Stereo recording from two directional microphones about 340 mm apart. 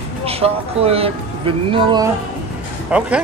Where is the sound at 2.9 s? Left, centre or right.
Centre.